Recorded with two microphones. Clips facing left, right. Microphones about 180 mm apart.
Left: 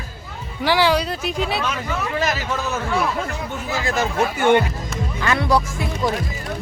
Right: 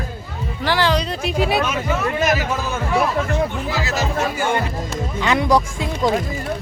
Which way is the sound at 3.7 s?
50° left (ahead or behind).